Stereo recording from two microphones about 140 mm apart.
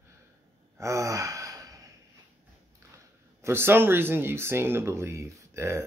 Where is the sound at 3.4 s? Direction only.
15° right (ahead or behind).